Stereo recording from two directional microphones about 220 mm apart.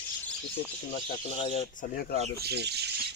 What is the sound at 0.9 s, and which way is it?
Speech, 25° left (ahead or behind).